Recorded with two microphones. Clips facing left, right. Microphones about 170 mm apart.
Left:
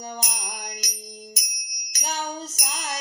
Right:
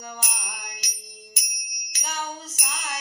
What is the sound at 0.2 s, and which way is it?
Music, 40° left (ahead or behind).